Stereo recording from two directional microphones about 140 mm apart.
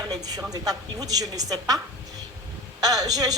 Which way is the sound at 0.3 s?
25° right (ahead or behind).